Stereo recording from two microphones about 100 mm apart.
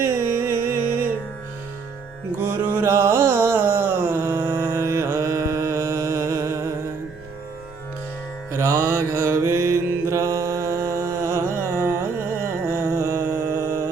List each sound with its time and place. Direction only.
0.0 s music: 25° right (ahead or behind)
2.4 s a sound: 25° right (ahead or behind)
8.5 s mantra: 30° right (ahead or behind)